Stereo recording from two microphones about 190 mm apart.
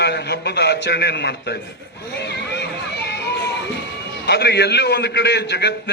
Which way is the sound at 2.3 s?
60° left (ahead or behind).